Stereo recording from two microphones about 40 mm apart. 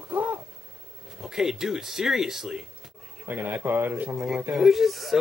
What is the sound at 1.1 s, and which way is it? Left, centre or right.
Speech, centre.